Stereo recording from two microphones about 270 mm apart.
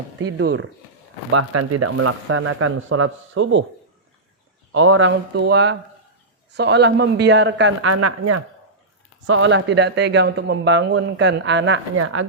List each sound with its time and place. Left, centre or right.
0.2 s speech: right
1.3 s speech: right
4.7 s speech: right
9.2 s speech: right